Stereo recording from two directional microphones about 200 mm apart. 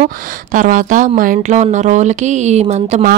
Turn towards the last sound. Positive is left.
turn(degrees=-35)  # may be behind; listen again after turning